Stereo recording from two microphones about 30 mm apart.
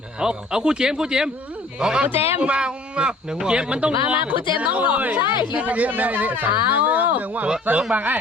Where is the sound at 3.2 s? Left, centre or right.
Centre.